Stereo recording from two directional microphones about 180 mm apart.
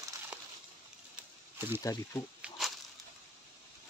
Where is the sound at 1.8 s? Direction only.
20° left (ahead or behind).